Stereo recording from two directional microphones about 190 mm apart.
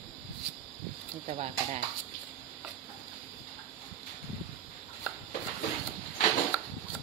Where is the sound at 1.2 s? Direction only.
35° right (ahead or behind).